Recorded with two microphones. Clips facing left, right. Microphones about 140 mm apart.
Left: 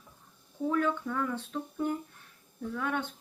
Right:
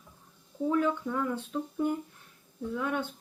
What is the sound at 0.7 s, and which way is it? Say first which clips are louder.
Speech: right 2 dB; 15° right (ahead or behind).